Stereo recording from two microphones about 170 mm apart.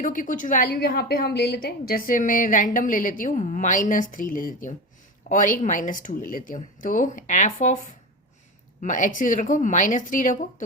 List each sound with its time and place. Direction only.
0.0 s a woman's voice: 50° left (ahead or behind)